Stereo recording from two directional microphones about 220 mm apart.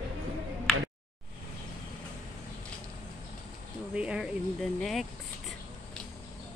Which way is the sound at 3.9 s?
5° right (ahead or behind).